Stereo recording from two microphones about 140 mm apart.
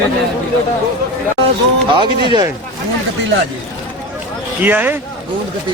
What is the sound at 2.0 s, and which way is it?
Speech, 35° right (ahead or behind).